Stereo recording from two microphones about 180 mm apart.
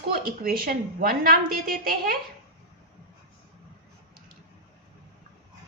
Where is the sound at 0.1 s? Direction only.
55° right (ahead or behind).